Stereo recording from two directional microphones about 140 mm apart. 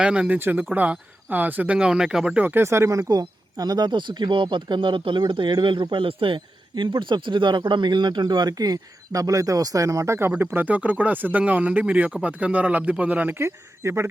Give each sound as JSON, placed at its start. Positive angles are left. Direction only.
{"t": 0.0, "sound": "speech", "side_deg": -5}